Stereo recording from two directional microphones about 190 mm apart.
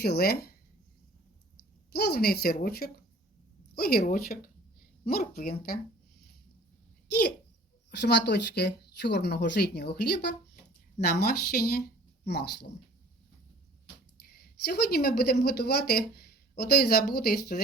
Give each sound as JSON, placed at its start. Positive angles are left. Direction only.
{"t": 0.0, "sound": "speech", "side_deg": 55}
{"t": 1.9, "sound": "speech", "side_deg": 55}
{"t": 7.1, "sound": "speech", "side_deg": 60}
{"t": 14.3, "sound": "speech", "side_deg": 55}